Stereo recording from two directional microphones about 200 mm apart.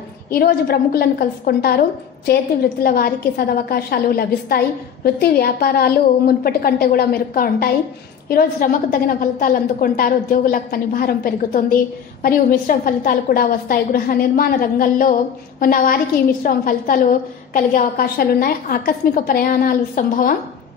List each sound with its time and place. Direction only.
0.3 s a woman's voice: 50° left (ahead or behind)